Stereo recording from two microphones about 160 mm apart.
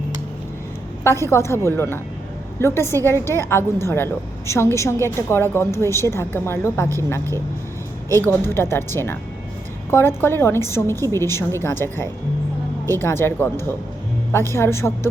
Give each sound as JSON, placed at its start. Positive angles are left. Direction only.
{"t": 1.0, "sound": "a woman's voice", "side_deg": 15}